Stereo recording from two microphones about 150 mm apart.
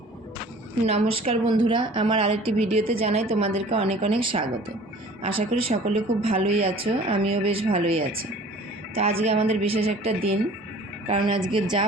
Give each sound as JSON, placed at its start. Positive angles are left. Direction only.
{"t": 0.9, "sound": "a woman's voice", "side_deg": -40}
{"t": 9.2, "sound": "a woman's voice", "side_deg": -45}
{"t": 11.4, "sound": "a woman's voice", "side_deg": -30}